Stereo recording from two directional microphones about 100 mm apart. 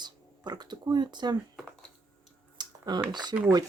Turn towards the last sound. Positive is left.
turn(degrees=-45)  # may be behind; listen again after turning